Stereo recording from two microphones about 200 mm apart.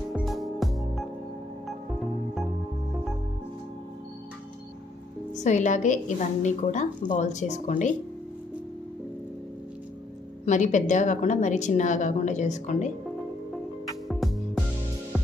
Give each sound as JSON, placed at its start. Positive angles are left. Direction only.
{"t": 0.1, "sound": "music", "side_deg": 0}
{"t": 5.4, "sound": "a woman's voice", "side_deg": 40}
{"t": 10.4, "sound": "a woman's voice", "side_deg": 40}
{"t": 14.0, "sound": "music", "side_deg": 0}